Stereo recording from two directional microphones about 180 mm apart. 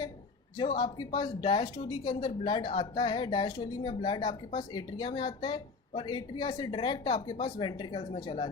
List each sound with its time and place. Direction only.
0.8 s speech: 25° left (ahead or behind)